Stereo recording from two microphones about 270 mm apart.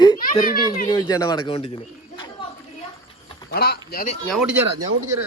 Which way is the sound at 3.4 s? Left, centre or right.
Left.